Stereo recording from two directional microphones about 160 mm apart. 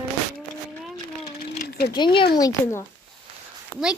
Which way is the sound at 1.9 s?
30° left (ahead or behind).